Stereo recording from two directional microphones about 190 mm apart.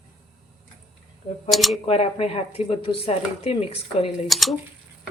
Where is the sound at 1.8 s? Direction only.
30° left (ahead or behind).